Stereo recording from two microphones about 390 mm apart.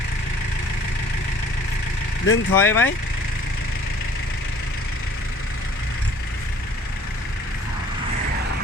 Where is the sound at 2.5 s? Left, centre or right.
Centre.